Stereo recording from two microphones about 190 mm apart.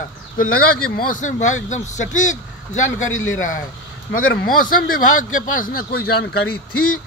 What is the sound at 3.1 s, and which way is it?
Speech, 90° left.